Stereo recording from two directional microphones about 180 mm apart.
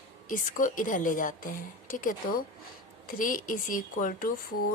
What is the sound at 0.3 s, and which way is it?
A woman's voice, 50° left (ahead or behind).